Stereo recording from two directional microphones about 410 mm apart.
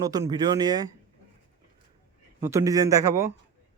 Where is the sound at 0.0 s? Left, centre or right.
Centre.